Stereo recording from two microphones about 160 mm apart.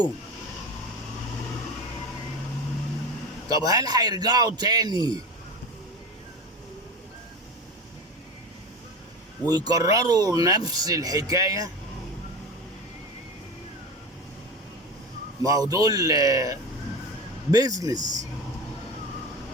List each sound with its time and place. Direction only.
3.5 s speech: 25° right (ahead or behind)
9.5 s speech: 25° right (ahead or behind)
15.4 s speech: 20° right (ahead or behind)